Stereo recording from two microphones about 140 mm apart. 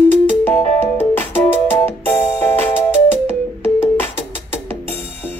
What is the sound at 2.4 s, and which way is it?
Music, 15° left (ahead or behind).